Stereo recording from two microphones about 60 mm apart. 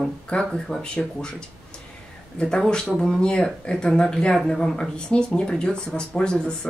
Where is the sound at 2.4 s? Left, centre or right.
Centre.